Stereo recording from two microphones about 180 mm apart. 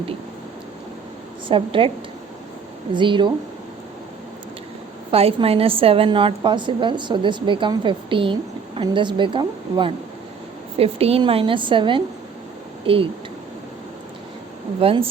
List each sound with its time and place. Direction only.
1.5 s a woman's voice: 30° right (ahead or behind)
2.9 s a woman's voice: 25° right (ahead or behind)
5.1 s a woman's voice: 35° right (ahead or behind)
14.8 s speech: 30° right (ahead or behind)